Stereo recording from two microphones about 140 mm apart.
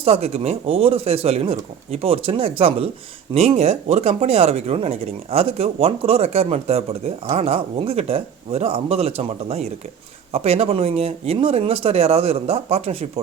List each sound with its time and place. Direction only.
0.0 s speech: 45° right (ahead or behind)